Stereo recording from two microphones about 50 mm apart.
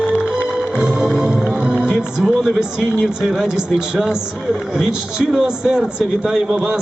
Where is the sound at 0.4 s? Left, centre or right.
Centre.